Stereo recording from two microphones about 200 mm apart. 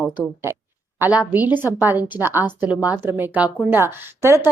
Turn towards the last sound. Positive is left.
turn(degrees=-15)  # may be behind; listen again after turning